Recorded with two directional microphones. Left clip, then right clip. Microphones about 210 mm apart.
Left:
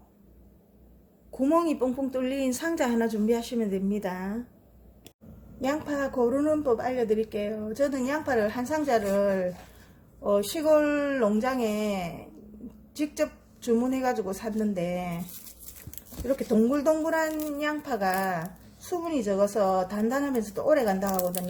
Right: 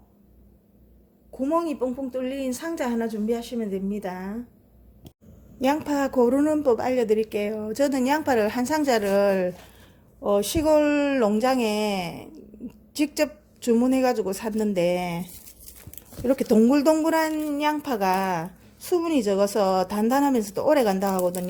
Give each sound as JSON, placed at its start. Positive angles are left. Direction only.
{"t": 1.3, "sound": "a woman's voice", "side_deg": 0}
{"t": 5.5, "sound": "speech", "side_deg": -35}
{"t": 16.2, "sound": "speech", "side_deg": -35}